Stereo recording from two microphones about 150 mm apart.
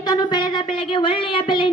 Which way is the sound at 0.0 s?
25° left (ahead or behind).